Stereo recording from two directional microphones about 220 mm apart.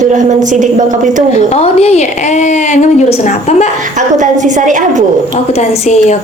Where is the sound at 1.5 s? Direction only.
30° left (ahead or behind).